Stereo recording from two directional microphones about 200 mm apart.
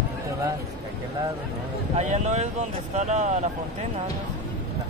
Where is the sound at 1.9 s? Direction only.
35° right (ahead or behind).